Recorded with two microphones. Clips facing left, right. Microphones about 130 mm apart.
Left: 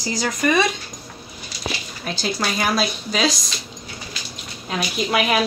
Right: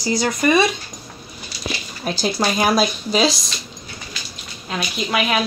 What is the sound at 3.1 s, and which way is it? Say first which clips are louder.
Speech: right 3 dB; 30° right (ahead or behind).